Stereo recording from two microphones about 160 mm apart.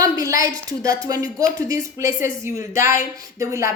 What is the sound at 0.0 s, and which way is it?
A woman's voice, 20° right (ahead or behind).